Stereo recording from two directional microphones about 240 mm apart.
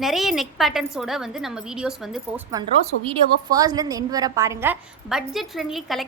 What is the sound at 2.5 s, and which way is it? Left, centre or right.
A woman's voice, centre.